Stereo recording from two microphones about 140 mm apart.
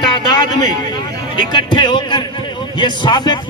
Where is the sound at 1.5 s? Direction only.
35° left (ahead or behind).